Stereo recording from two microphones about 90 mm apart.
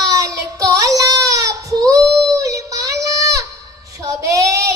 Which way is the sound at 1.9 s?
40° right (ahead or behind).